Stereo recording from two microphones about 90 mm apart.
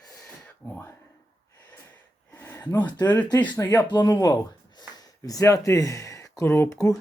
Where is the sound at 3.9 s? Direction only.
45° left (ahead or behind); by 6.7 s 25° left (ahead or behind).